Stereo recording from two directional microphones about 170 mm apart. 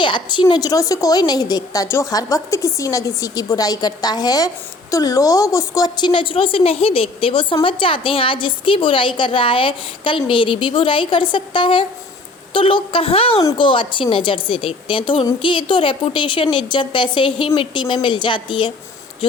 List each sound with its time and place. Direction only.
0.0 s a woman's voice: 30° left (ahead or behind)
13.4 s a woman's voice: 20° left (ahead or behind)
13.7 s a woman's voice: 30° left (ahead or behind)